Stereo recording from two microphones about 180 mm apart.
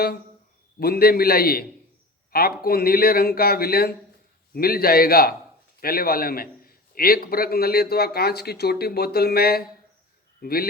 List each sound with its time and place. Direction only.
0.8 s a man's voice: 60° left (ahead or behind)